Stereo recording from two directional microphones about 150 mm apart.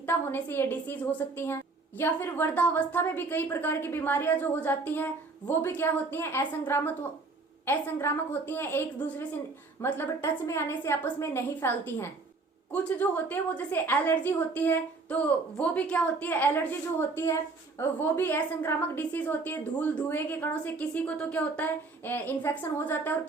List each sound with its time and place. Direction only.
0.0 s a woman's voice: 15° left (ahead or behind)
2.0 s a woman's voice: 15° left (ahead or behind)